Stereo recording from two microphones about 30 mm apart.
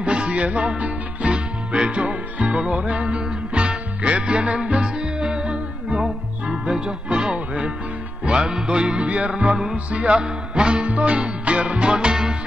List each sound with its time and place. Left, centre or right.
0.0 s music: right
4.8 s music: right
8.3 s music: right
10.2 s music: right
10.9 s music: right